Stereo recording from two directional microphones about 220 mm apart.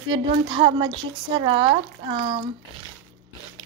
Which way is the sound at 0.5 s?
20° right (ahead or behind).